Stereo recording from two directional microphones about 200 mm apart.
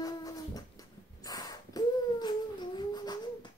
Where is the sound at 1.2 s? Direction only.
20° left (ahead or behind).